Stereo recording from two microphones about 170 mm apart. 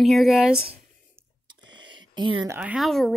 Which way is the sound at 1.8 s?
30° right (ahead or behind).